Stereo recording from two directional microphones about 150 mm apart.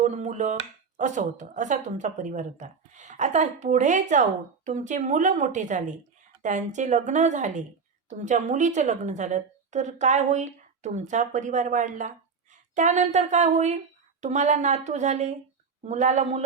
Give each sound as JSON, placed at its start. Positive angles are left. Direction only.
{"t": 0.0, "sound": "chop", "side_deg": -50}
{"t": 0.9, "sound": "a woman's voice", "side_deg": -55}